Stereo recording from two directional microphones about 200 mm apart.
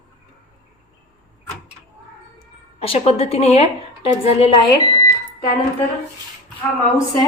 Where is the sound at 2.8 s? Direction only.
30° left (ahead or behind).